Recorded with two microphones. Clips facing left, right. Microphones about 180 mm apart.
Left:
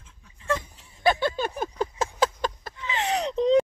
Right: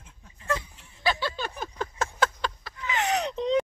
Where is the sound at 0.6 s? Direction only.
45° left (ahead or behind).